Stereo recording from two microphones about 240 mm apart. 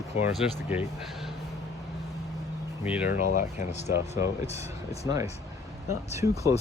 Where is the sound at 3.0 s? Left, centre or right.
Left.